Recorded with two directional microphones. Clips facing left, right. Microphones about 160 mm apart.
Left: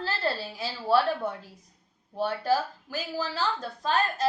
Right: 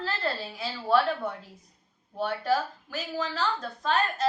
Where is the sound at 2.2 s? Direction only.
35° left (ahead or behind).